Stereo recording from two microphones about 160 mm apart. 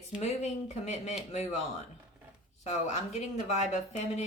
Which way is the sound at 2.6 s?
45° left (ahead or behind).